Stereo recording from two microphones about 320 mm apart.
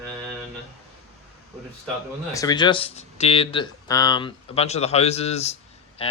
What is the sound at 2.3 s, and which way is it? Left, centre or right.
Speech, centre.